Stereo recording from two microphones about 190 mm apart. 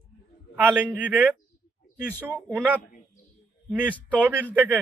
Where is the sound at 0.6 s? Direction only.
10° right (ahead or behind).